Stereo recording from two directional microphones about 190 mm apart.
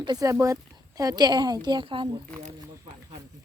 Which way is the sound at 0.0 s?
20° right (ahead or behind).